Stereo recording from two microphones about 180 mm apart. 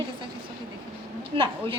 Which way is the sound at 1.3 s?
30° right (ahead or behind).